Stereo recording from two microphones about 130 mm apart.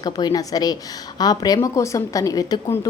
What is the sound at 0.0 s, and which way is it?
A woman's voice, 30° left (ahead or behind).